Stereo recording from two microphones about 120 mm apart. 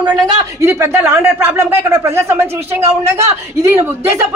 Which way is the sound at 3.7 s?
20° right (ahead or behind).